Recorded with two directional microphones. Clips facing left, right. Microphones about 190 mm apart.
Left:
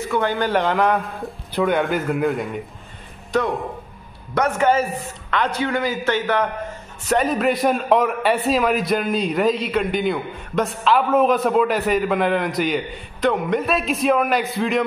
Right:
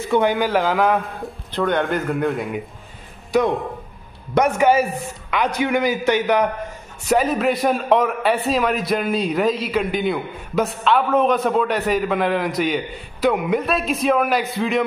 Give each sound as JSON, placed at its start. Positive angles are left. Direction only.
{"t": 0.1, "sound": "speech", "side_deg": -15}
{"t": 0.4, "sound": "a man's voice", "side_deg": 0}
{"t": 3.3, "sound": "a man's voice", "side_deg": -10}
{"t": 7.1, "sound": "a man's voice", "side_deg": 0}